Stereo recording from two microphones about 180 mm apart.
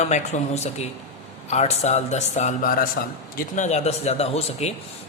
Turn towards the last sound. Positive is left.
turn(degrees=35)  # may be behind; listen again after turning